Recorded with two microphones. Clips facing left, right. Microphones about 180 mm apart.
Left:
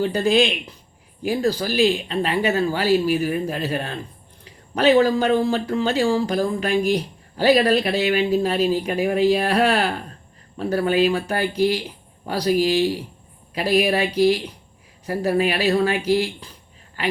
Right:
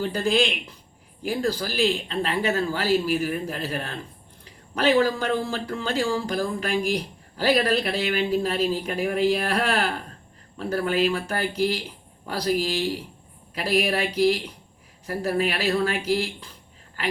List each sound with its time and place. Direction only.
0.0 s speech: 20° left (ahead or behind)